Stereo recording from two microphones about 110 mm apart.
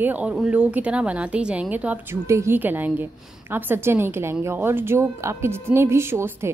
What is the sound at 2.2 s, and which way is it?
A woman's voice, 25° right (ahead or behind).